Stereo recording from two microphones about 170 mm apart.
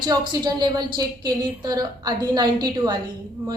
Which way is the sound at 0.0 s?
25° right (ahead or behind).